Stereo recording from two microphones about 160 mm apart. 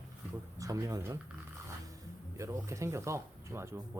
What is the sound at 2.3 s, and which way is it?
Speech, 20° right (ahead or behind).